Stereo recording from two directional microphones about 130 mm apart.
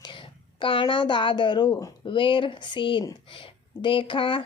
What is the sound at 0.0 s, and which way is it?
A woman's voice, 40° left (ahead or behind).